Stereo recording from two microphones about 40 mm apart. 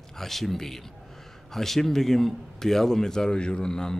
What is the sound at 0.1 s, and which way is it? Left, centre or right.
A man's voice, centre.